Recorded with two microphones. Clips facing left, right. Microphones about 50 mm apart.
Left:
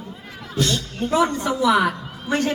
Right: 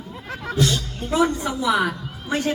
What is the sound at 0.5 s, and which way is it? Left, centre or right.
Speech, centre.